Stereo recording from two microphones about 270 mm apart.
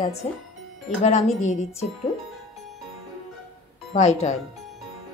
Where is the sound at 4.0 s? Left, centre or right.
Left.